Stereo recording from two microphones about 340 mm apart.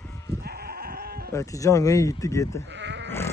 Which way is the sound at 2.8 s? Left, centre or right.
Right.